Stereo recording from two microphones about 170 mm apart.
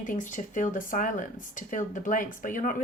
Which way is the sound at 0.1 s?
50° left (ahead or behind).